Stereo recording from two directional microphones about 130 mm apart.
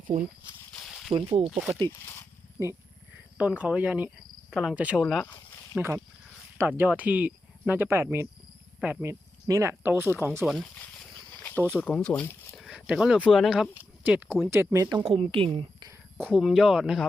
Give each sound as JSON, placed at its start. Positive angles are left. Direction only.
{"t": 0.7, "sound": "a sound", "side_deg": 0}
{"t": 1.1, "sound": "a woman's voice", "side_deg": -50}
{"t": 2.6, "sound": "speech", "side_deg": -20}
{"t": 3.3, "sound": "speech", "side_deg": -10}
{"t": 5.0, "sound": "speech", "side_deg": 0}
{"t": 6.6, "sound": "speech", "side_deg": -15}
{"t": 10.4, "sound": "speech", "side_deg": 0}
{"t": 11.6, "sound": "speech", "side_deg": 10}
{"t": 12.5, "sound": "speech", "side_deg": -5}
{"t": 14.0, "sound": "speech", "side_deg": -15}
{"t": 15.0, "sound": "a woman's voice", "side_deg": -45}
{"t": 15.8, "sound": "a sound", "side_deg": -20}
{"t": 16.3, "sound": "speech", "side_deg": 0}